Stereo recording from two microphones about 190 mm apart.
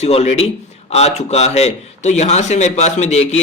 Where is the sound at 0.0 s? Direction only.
35° left (ahead or behind).